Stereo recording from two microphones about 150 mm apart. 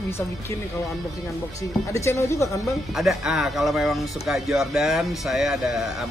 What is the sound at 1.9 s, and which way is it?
Speech, 20° left (ahead or behind).